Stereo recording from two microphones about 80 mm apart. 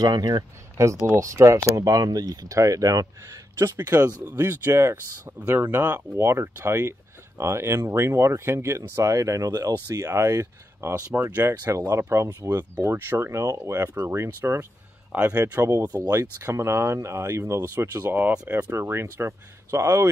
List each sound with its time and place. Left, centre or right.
0.0 s speech: right
0.8 s speech: right
3.7 s speech: right
5.4 s speech: right
6.1 s speech: right
9.5 s speech: right
15.1 s speech: right
15.5 s speech: right
18.0 s speech: right